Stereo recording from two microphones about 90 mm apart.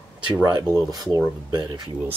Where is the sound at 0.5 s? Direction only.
45° right (ahead or behind).